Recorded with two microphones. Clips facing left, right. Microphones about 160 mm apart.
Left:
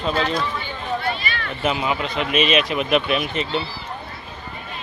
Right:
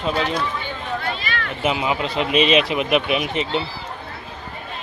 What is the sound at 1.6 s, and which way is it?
Speech, 15° right (ahead or behind).